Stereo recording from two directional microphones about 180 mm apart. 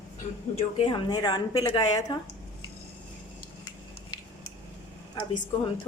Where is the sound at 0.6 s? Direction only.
30° left (ahead or behind).